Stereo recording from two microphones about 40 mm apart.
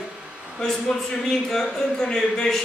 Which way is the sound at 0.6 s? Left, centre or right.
Centre.